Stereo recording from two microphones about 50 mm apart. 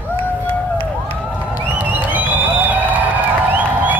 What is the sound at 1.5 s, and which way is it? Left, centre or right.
Music, right.